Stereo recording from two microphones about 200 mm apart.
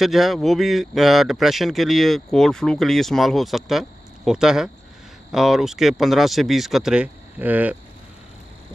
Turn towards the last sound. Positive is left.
turn(degrees=-10)  # may be behind; listen again after turning